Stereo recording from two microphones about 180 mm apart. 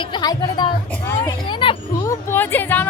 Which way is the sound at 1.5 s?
25° left (ahead or behind).